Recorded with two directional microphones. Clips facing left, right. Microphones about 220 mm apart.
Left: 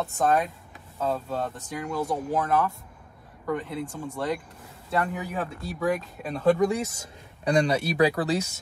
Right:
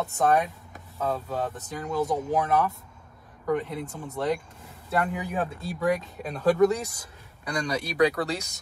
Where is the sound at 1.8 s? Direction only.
15° right (ahead or behind).